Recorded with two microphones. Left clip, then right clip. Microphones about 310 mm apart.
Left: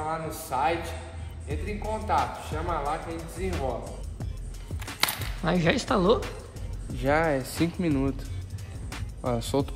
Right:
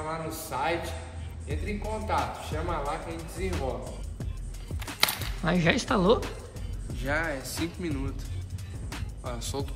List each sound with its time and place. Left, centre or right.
0.1 s speech: centre
5.0 s speech: centre
7.0 s speech: left
9.2 s speech: left